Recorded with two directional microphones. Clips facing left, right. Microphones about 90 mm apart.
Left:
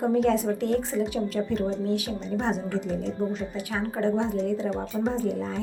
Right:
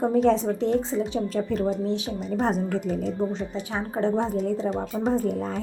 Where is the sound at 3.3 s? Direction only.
25° right (ahead or behind).